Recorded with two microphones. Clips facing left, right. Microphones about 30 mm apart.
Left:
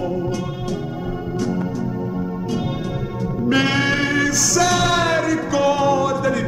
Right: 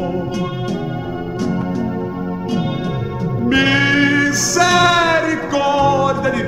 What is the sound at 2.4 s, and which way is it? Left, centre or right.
Music, centre.